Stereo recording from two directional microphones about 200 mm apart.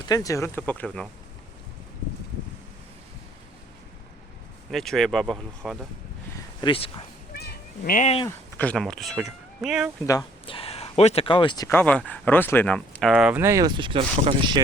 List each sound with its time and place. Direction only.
0.0 s speech: 15° left (ahead or behind)
4.7 s speech: centre (ahead or behind)
6.6 s speech: 25° left (ahead or behind)
7.3 s cat: 50° left (ahead or behind)
8.5 s speech: 5° left (ahead or behind)
10.1 s speech: 20° left (ahead or behind); by 14.6 s 25° right (ahead or behind)